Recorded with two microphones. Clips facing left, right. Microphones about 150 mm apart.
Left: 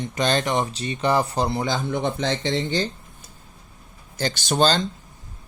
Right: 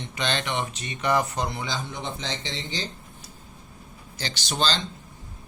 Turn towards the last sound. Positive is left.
turn(degrees=50)  # may be behind; listen again after turning